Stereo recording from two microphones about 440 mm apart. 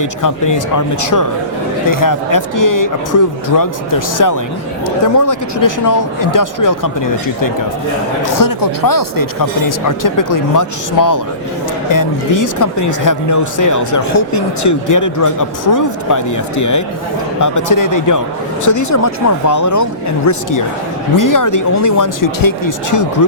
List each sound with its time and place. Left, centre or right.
0.0 s speech: left